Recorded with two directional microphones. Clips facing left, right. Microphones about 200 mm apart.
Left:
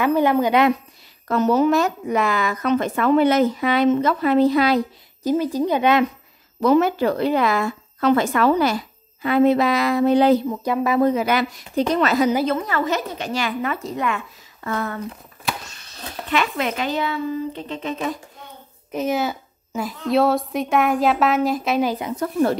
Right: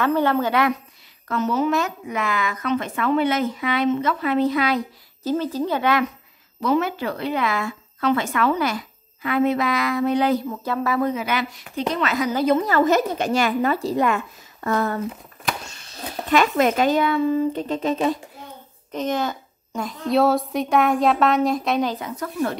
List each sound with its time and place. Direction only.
0.0 s speech: 15° left (ahead or behind)
1.3 s speech: 40° left (ahead or behind)
5.2 s speech: 15° left (ahead or behind)
6.6 s speech: 40° left (ahead or behind)
10.5 s speech: 15° left (ahead or behind)
11.0 s speech: 35° left (ahead or behind)
12.6 s speech: 45° right (ahead or behind)
16.3 s speech: 45° right (ahead or behind)
18.9 s a woman's voice: 10° left (ahead or behind)
22.2 s speech: 35° left (ahead or behind)